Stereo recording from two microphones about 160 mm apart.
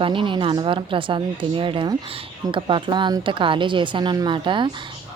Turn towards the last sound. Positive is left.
turn(degrees=-30)  # may be behind; listen again after turning